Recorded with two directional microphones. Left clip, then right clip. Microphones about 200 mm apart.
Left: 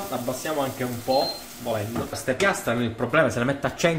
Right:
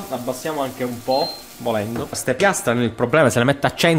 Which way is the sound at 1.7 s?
55° right (ahead or behind).